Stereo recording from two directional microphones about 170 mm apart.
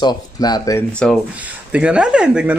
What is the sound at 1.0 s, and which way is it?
Speech, 5° left (ahead or behind).